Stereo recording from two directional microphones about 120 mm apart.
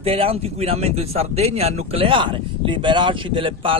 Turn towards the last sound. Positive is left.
turn(degrees=-45)  # may be behind; listen again after turning